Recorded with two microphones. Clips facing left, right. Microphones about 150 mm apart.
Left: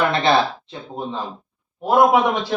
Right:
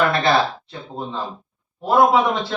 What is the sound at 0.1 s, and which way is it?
Speech, 20° left (ahead or behind).